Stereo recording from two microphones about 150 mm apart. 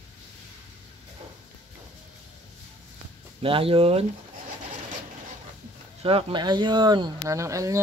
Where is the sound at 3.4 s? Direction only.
35° right (ahead or behind).